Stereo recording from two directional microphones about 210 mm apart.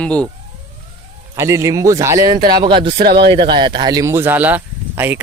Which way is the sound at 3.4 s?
20° right (ahead or behind).